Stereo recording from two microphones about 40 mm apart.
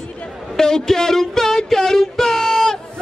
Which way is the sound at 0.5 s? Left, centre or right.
Centre.